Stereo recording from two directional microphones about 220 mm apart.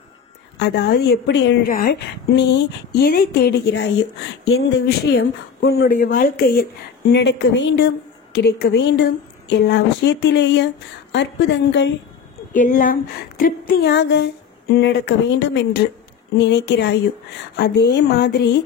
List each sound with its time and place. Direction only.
0.6 s a woman's voice: 50° left (ahead or behind)
12.5 s a woman's voice: 35° left (ahead or behind)